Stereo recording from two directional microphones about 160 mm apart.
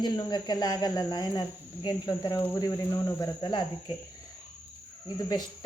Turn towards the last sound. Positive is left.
turn(degrees=25)  # may be behind; listen again after turning